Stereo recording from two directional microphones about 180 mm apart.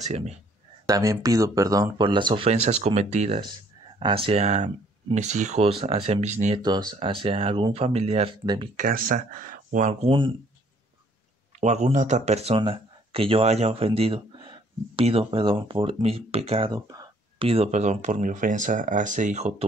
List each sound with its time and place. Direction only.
0.0 s speech: 40° right (ahead or behind)
0.8 s speech: 20° right (ahead or behind); by 6.6 s 40° right (ahead or behind)
6.6 s speech: 25° right (ahead or behind)
8.7 s speech: 50° right (ahead or behind)
10.0 s speech: 30° right (ahead or behind)
11.6 s speech: 40° right (ahead or behind); by 17.5 s 20° right (ahead or behind)
17.5 s speech: 35° right (ahead or behind)